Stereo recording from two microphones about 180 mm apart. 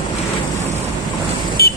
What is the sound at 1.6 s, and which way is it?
Vehicle, 60° left (ahead or behind).